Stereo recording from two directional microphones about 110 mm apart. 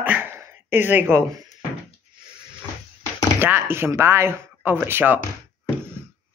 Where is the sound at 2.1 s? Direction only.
45° right (ahead or behind).